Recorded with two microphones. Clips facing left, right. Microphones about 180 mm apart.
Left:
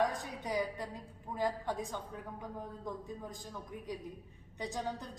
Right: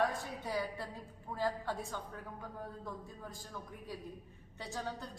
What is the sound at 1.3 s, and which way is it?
A woman's voice, 15° left (ahead or behind).